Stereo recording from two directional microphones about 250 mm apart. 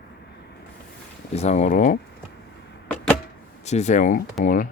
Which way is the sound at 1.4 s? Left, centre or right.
Left.